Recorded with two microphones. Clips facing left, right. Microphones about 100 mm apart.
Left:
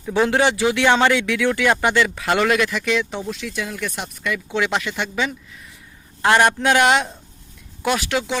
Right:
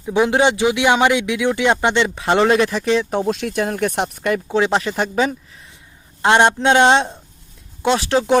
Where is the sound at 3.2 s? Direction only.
65° right (ahead or behind); by 4.6 s 45° right (ahead or behind).